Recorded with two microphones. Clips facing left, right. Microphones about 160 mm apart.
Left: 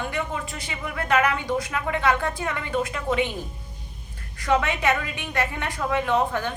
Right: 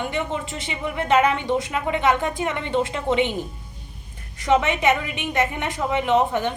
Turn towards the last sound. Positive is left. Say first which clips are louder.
# right 3 dB
turn(degrees=-20)  # may be behind; listen again after turning